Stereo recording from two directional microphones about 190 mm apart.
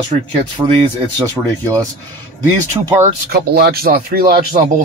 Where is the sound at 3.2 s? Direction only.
55° right (ahead or behind).